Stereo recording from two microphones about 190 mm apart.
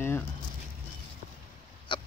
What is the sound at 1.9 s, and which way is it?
Pig, 25° left (ahead or behind).